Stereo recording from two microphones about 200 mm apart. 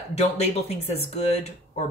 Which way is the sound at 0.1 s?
35° left (ahead or behind).